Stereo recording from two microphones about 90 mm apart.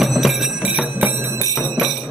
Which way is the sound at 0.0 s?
Centre (ahead or behind).